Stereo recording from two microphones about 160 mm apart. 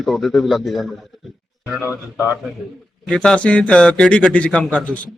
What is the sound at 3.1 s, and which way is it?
Speech, 5° left (ahead or behind).